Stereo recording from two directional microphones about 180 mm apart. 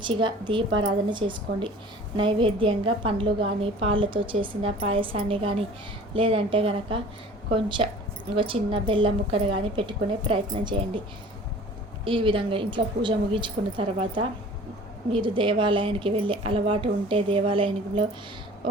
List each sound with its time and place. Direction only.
0.0 s a woman's voice: 25° right (ahead or behind)
12.0 s a woman's voice: 30° right (ahead or behind)